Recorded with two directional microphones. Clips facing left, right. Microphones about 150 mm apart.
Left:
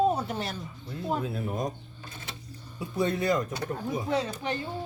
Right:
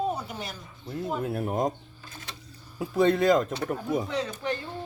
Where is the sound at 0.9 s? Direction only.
60° right (ahead or behind).